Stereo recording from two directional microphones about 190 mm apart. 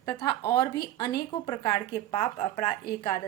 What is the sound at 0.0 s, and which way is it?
A woman's voice, 20° left (ahead or behind).